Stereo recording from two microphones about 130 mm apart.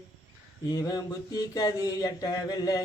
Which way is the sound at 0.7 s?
30° left (ahead or behind).